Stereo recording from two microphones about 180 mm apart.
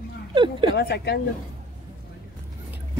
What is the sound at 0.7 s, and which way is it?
Speech, 70° left (ahead or behind).